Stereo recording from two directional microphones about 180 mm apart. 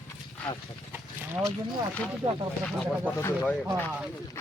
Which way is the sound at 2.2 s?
20° right (ahead or behind).